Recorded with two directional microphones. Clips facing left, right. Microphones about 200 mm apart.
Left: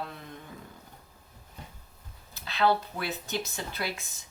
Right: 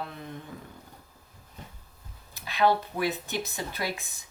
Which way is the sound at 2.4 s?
15° right (ahead or behind).